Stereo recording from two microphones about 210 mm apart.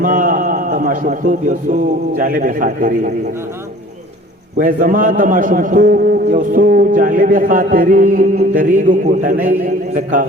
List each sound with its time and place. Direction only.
0.0 s a man's voice: 40° right (ahead or behind)
4.5 s a man's voice: 40° right (ahead or behind)